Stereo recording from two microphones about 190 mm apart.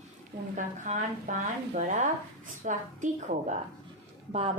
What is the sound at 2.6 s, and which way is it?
Speech, 40° right (ahead or behind).